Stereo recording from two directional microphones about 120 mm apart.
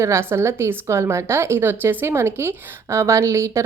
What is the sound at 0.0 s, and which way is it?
A woman's voice, 20° right (ahead or behind).